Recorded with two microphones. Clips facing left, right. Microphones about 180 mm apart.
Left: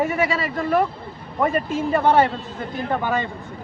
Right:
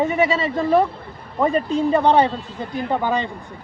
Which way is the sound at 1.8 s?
15° right (ahead or behind).